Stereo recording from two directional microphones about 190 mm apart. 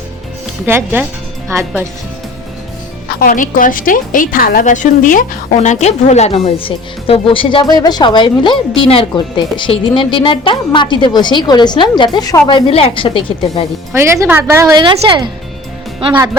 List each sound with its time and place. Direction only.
0.6 s speech: 10° right (ahead or behind)
3.1 s a woman's voice: 50° left (ahead or behind); by 13.7 s 25° left (ahead or behind)
13.9 s speech: 15° right (ahead or behind)